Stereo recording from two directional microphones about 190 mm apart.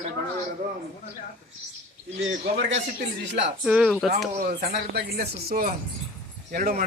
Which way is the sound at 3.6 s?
5° right (ahead or behind).